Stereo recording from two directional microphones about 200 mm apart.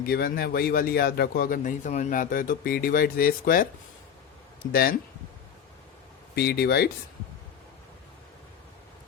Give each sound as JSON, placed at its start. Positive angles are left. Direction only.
{"t": 0.0, "sound": "a man's voice", "side_deg": 50}
{"t": 4.7, "sound": "a man's voice", "side_deg": 50}
{"t": 6.3, "sound": "a man's voice", "side_deg": 55}